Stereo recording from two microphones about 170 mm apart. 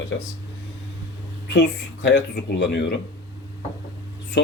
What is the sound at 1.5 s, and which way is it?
Speech, 90° left.